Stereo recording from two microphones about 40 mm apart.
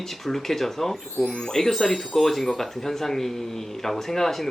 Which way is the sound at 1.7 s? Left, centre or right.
Centre.